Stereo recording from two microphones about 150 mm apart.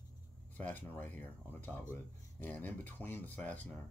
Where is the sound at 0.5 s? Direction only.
10° left (ahead or behind).